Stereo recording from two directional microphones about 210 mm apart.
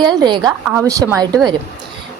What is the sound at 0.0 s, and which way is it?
A woman's voice, 20° right (ahead or behind).